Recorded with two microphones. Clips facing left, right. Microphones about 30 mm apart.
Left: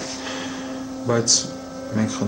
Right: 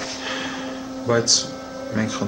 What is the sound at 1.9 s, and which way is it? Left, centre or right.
Speech, centre.